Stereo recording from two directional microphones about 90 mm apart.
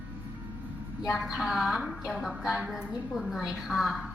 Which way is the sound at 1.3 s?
5° right (ahead or behind).